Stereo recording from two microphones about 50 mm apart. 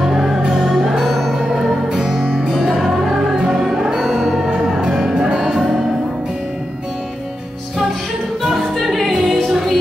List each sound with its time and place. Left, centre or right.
0.0 s music: centre
0.4 s music: centre
8.4 s music: centre